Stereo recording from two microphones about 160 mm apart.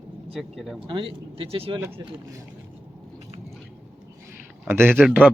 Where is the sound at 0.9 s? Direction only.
35° right (ahead or behind).